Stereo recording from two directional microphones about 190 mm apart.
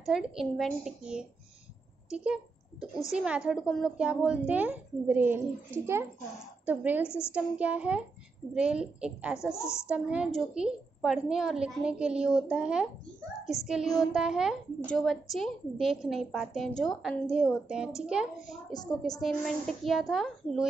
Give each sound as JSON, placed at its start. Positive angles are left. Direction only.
{"t": 0.0, "sound": "a woman's voice", "side_deg": 0}
{"t": 6.6, "sound": "speech", "side_deg": -10}
{"t": 7.1, "sound": "a woman's voice", "side_deg": 15}
{"t": 7.3, "sound": "a woman's voice", "side_deg": -5}
{"t": 9.5, "sound": "a woman's voice", "side_deg": 15}
{"t": 9.8, "sound": "a woman's voice", "side_deg": -5}
{"t": 18.7, "sound": "a woman's voice", "side_deg": 20}
{"t": 19.1, "sound": "a woman's voice", "side_deg": 0}